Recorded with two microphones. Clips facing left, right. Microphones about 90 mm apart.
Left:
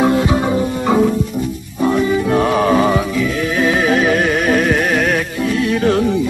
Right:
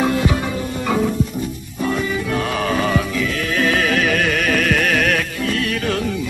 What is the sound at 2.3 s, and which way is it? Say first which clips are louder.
Music: left 7 dB; 30° left (ahead or behind).